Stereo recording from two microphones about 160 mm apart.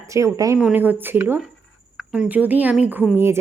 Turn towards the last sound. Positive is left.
turn(degrees=-15)  # may be behind; listen again after turning